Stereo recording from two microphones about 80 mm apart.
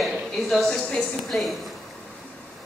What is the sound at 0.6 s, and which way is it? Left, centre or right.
Speech, centre.